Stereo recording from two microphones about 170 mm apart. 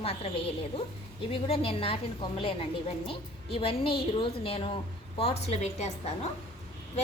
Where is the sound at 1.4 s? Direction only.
35° left (ahead or behind).